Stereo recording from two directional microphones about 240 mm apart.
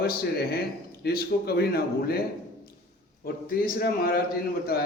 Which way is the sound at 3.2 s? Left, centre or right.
Left.